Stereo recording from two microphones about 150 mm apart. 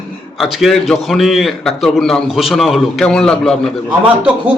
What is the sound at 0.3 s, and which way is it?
A man's voice, centre (ahead or behind).